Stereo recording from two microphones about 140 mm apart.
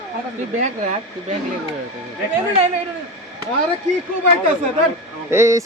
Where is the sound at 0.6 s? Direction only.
60° right (ahead or behind).